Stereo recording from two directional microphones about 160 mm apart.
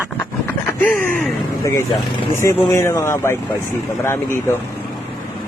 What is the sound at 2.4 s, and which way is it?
Speech, 15° left (ahead or behind).